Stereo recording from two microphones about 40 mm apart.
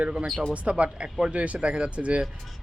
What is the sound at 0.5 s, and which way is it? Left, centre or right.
Speech, right.